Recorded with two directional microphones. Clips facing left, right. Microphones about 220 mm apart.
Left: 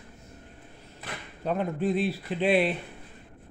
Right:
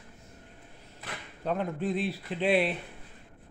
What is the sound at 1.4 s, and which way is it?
Speech, 10° left (ahead or behind).